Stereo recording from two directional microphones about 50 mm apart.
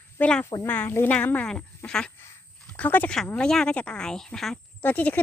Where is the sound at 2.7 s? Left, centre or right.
Left.